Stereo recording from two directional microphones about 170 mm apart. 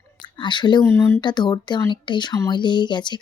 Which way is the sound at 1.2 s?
25° left (ahead or behind).